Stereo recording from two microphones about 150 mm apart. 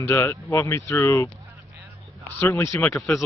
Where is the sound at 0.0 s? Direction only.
15° left (ahead or behind).